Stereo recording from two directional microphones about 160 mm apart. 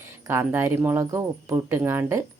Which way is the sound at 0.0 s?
15° right (ahead or behind).